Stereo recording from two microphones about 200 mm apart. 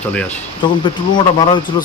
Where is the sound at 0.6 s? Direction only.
25° left (ahead or behind).